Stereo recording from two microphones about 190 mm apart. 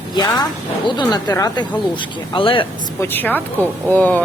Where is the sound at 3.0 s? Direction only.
10° left (ahead or behind).